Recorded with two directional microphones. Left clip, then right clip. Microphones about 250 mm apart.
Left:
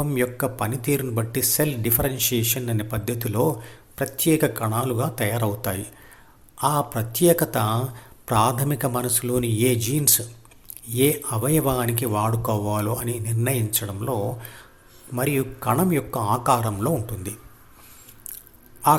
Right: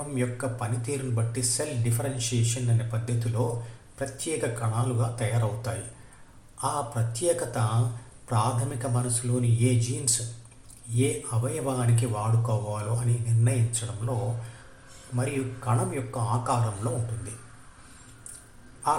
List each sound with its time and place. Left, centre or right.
0.2 s a man's voice: left
10.9 s speech: left